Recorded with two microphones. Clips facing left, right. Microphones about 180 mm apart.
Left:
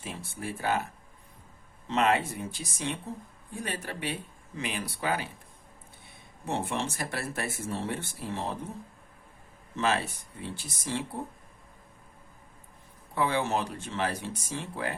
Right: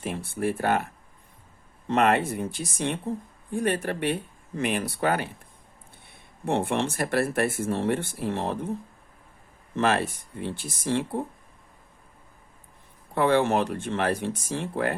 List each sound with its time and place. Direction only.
0.0 s speech: 60° right (ahead or behind)
1.9 s speech: 55° right (ahead or behind)
6.4 s speech: 60° right (ahead or behind)
9.7 s speech: 55° right (ahead or behind)
13.1 s speech: 60° right (ahead or behind)